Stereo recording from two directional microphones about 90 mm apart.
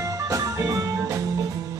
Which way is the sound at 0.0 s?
35° right (ahead or behind).